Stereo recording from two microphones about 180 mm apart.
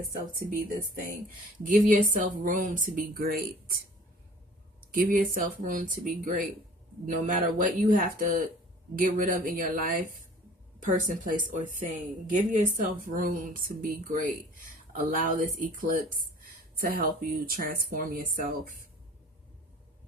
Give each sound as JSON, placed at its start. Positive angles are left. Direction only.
{"t": 0.0, "sound": "speech", "side_deg": -50}
{"t": 4.9, "sound": "speech", "side_deg": -50}